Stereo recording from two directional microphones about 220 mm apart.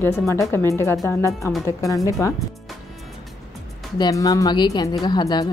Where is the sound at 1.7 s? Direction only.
15° left (ahead or behind).